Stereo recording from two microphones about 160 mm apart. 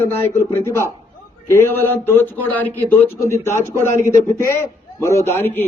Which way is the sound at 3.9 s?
15° left (ahead or behind).